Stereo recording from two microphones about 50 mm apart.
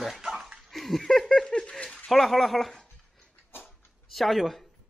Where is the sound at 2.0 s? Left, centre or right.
Centre.